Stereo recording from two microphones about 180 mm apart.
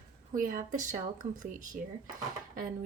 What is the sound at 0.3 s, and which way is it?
Speech, 45° right (ahead or behind).